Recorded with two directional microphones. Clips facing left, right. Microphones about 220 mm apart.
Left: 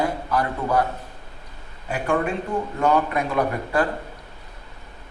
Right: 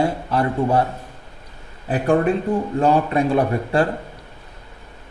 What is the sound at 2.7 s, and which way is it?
A man's voice, 30° right (ahead or behind).